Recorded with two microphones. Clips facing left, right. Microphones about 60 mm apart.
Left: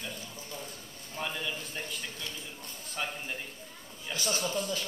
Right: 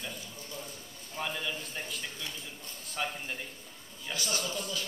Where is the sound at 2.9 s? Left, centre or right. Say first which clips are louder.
Right 1 dB; centre.